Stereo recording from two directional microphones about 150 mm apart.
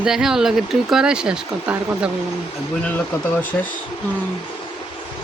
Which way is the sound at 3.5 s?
10° left (ahead or behind).